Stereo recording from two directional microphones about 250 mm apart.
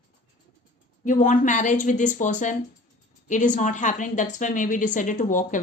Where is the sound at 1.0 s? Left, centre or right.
Left.